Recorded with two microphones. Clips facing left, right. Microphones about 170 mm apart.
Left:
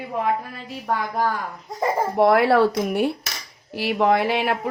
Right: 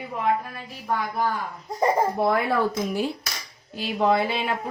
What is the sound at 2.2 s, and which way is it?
A woman's voice, 80° left.